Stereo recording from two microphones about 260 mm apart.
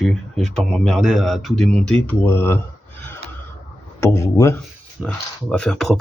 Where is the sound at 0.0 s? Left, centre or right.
Centre.